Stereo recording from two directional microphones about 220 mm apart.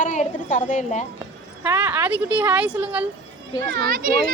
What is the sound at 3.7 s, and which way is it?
Speech, 40° right (ahead or behind).